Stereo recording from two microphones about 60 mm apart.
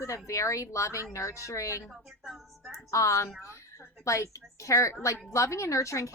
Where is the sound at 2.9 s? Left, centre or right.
Left.